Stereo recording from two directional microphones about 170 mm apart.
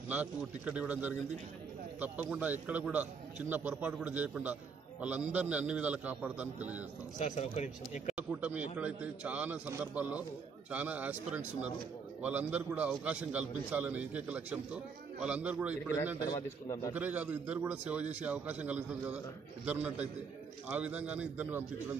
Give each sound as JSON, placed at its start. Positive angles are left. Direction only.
{"t": 0.1, "sound": "a man's voice", "side_deg": -10}
{"t": 7.2, "sound": "speech", "side_deg": 45}
{"t": 8.2, "sound": "a man's voice", "side_deg": -10}
{"t": 16.3, "sound": "a man's voice", "side_deg": 20}
{"t": 16.9, "sound": "a man's voice", "side_deg": -10}